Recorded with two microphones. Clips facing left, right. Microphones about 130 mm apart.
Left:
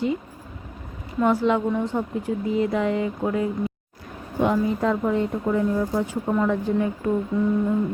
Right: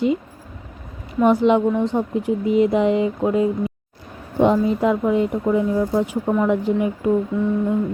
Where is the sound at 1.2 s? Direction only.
20° right (ahead or behind).